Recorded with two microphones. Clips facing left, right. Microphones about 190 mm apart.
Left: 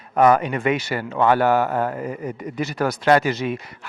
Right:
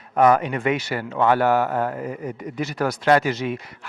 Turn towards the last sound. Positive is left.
turn(degrees=10)  # may be behind; listen again after turning